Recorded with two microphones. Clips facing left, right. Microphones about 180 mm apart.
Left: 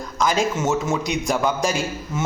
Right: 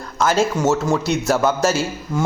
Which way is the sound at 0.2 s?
15° left (ahead or behind).